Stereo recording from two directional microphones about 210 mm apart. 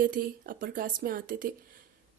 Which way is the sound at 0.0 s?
40° right (ahead or behind).